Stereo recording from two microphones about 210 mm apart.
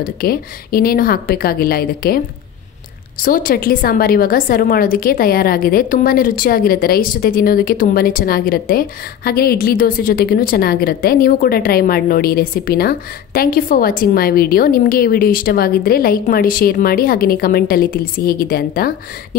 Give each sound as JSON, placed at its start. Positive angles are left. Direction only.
{"t": 0.0, "sound": "a woman's voice", "side_deg": 45}